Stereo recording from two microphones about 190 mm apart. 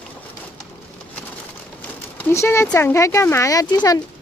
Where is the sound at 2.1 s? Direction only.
10° left (ahead or behind).